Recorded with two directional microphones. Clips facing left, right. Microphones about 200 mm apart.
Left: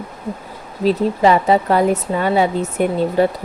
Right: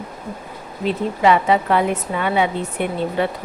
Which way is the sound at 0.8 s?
35° left (ahead or behind).